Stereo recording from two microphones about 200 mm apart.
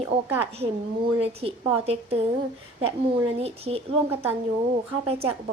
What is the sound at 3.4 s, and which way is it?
Speech, 30° right (ahead or behind).